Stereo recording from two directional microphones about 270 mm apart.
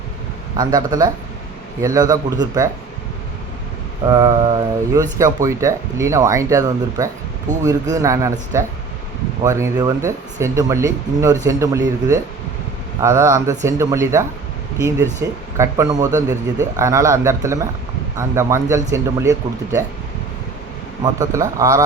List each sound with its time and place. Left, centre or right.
0.5 s speech: centre
4.0 s speech: centre
21.0 s speech: centre